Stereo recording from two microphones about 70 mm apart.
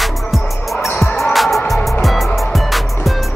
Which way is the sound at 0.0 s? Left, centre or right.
Centre.